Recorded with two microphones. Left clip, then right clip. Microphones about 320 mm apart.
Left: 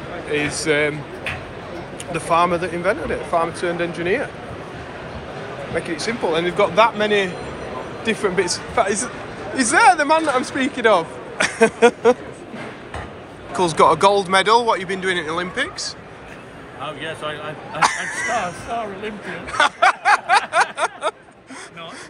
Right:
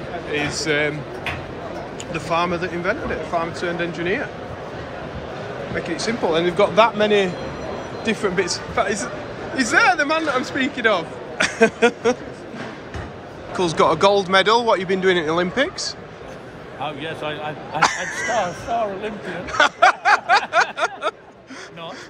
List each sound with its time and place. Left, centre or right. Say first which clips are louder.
0.7 s speech: left 2 dB; centre
2.1 s speech: left 4 dB; centre
5.9 s speech: right 2 dB; centre
13.5 s speech: left 3 dB; centre; by 17.4 s right
17.7 s speech: left 1 dB; centre
19.5 s snicker: right 1 dB; centre